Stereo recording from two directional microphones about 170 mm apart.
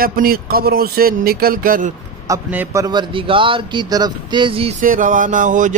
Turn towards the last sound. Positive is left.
turn(degrees=-50)  # may be behind; listen again after turning